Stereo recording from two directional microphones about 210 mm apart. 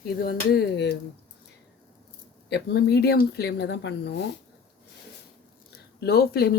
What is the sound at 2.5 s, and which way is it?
Speech, 50° left (ahead or behind).